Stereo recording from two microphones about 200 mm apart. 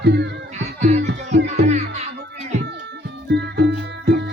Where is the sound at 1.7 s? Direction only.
35° right (ahead or behind).